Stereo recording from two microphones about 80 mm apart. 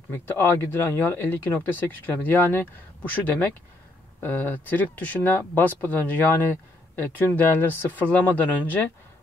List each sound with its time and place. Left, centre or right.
0.1 s speech: left